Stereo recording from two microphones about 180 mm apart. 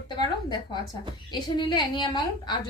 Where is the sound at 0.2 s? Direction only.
25° left (ahead or behind).